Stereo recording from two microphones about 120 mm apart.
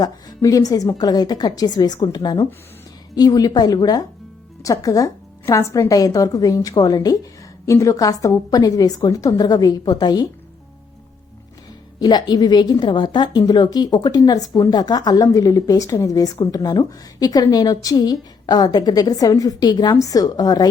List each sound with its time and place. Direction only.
0.0 s a woman's voice: 30° left (ahead or behind)
11.9 s a woman's voice: 35° left (ahead or behind)